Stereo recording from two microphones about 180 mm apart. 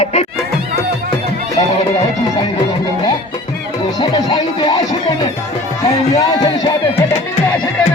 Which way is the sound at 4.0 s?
20° left (ahead or behind).